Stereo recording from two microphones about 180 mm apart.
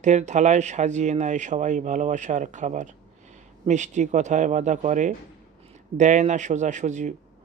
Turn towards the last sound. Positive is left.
turn(degrees=-40)  # may be behind; listen again after turning